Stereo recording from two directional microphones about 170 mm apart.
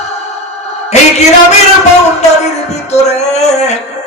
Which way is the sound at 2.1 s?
40° left (ahead or behind).